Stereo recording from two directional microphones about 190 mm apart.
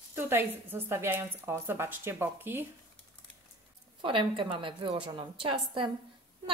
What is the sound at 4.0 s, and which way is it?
A woman's voice, 25° right (ahead or behind).